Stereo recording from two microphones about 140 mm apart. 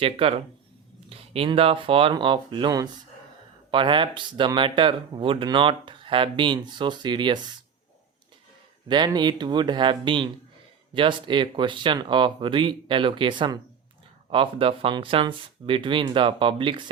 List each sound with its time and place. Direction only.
0.0 s speech: 45° right (ahead or behind)
8.9 s speech: 30° right (ahead or behind)